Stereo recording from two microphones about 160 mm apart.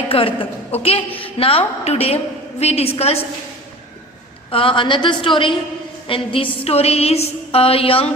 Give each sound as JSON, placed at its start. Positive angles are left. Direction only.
{"t": 0.1, "sound": "a woman's voice", "side_deg": 35}
{"t": 4.5, "sound": "a woman's voice", "side_deg": 30}